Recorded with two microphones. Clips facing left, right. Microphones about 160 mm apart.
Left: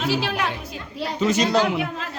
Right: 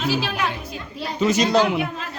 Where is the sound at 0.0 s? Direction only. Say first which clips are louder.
Even; 70° left (ahead or behind).